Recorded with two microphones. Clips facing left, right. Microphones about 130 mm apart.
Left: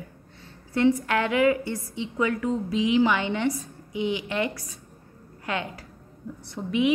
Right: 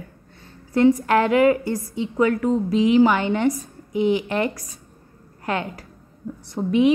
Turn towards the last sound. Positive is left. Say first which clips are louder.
# right 6 dB
turn(degrees=-35)  # may be behind; listen again after turning